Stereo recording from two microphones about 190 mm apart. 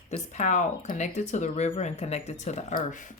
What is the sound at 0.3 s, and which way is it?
Speech, 40° left (ahead or behind).